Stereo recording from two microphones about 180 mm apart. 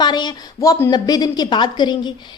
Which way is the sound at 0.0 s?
25° left (ahead or behind).